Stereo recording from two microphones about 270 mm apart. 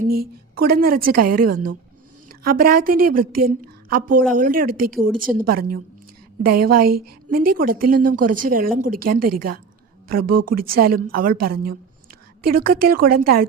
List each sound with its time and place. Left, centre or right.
0.2 s a woman's voice: right